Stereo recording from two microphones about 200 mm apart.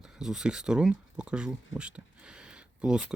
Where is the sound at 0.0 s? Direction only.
5° right (ahead or behind).